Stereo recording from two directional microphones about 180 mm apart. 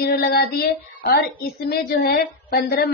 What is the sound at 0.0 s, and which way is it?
A woman's voice, 60° left (ahead or behind).